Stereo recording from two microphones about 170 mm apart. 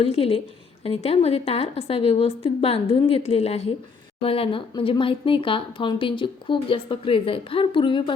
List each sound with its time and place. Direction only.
0.0 s speech: 35° left (ahead or behind)